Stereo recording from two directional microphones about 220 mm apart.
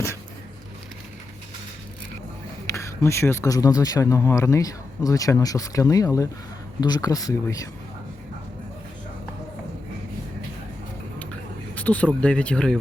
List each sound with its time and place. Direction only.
2.6 s speech: 15° left (ahead or behind)
11.7 s speech: 5° left (ahead or behind)